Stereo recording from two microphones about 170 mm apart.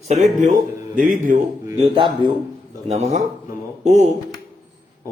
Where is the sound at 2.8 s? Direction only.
40° right (ahead or behind).